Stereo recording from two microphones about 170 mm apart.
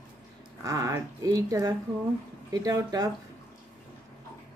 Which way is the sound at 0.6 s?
20° right (ahead or behind).